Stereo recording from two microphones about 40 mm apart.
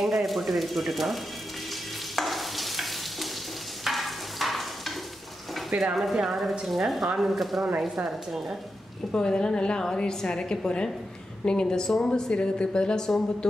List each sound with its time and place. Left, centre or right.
0.0 s speech: centre
2.1 s stir: centre
5.9 s speech: centre
9.1 s a woman's voice: left